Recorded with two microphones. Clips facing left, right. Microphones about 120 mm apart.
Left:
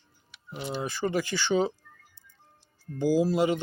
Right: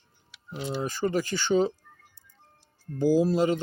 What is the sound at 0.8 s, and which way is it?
Speech, 40° right (ahead or behind).